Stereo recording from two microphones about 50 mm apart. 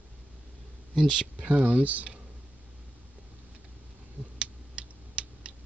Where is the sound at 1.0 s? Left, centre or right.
Centre.